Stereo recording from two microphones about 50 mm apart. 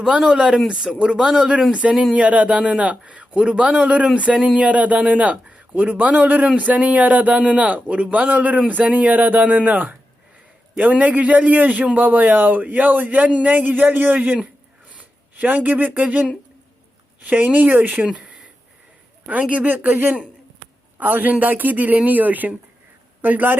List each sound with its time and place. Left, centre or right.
0.2 s a man's voice: centre; by 16.2 s right
17.2 s speech: right
18.0 s a sound: right
19.3 s a man's voice: right
19.6 s speech: right